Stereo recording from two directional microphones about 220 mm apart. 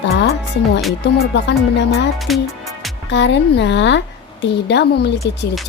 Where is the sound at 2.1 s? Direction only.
Centre (ahead or behind).